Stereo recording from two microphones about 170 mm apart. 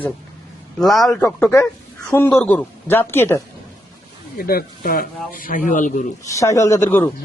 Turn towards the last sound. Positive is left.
turn(degrees=15)  # may be behind; listen again after turning